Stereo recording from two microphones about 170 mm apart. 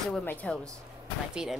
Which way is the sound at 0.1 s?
10° left (ahead or behind).